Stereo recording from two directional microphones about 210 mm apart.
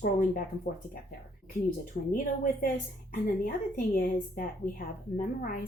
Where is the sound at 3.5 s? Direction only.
40° left (ahead or behind).